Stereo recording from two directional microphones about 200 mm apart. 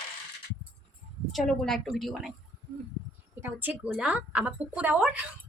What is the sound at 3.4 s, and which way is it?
A woman's voice, 10° right (ahead or behind).